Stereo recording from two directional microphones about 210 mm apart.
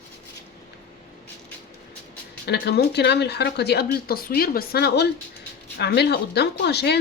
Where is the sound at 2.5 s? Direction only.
50° left (ahead or behind).